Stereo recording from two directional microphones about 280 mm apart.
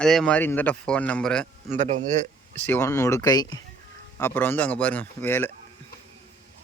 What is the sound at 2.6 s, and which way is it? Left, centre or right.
Speech, centre.